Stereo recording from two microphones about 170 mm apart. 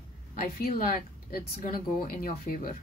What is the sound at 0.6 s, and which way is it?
Speech, 60° left (ahead or behind).